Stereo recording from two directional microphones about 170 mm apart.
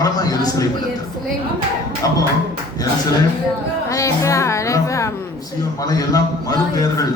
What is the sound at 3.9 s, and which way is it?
Speech, 20° left (ahead or behind).